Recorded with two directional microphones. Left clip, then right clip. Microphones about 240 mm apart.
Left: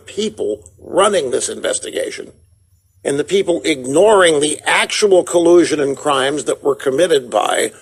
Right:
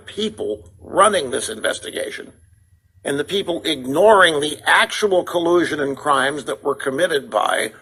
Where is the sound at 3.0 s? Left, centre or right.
Left.